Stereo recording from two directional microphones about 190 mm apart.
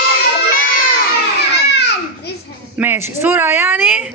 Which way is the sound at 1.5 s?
60° left (ahead or behind).